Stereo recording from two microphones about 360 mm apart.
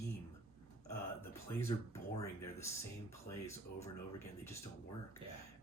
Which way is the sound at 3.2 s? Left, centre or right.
Centre.